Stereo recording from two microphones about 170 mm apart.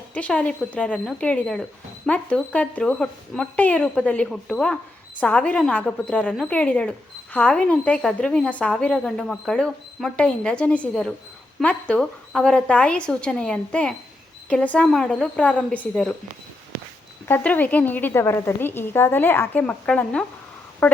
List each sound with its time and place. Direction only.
0.1 s a woman's voice: 10° left (ahead or behind)
17.2 s a woman's voice: 10° left (ahead or behind)